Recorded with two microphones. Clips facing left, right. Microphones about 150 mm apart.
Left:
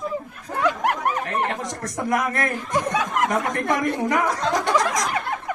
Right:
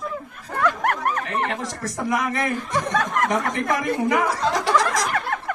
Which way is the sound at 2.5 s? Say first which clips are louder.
Even; 15° left (ahead or behind).